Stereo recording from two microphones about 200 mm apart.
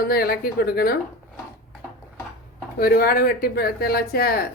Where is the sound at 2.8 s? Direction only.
50° left (ahead or behind).